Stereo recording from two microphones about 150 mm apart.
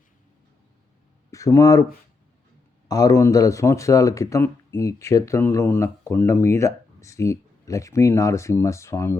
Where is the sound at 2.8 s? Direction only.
25° left (ahead or behind).